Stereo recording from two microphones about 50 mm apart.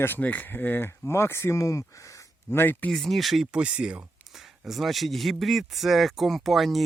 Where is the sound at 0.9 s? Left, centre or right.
Left.